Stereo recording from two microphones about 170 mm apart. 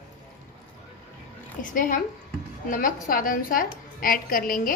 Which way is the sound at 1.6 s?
55° left (ahead or behind).